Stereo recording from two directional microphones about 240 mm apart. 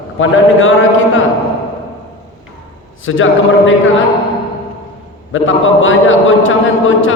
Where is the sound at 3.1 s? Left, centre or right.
Left.